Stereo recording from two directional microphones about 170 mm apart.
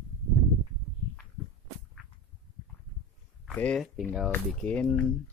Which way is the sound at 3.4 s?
5° left (ahead or behind).